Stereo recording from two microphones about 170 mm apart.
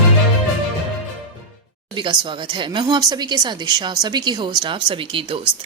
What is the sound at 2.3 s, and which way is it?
Speech, 30° right (ahead or behind).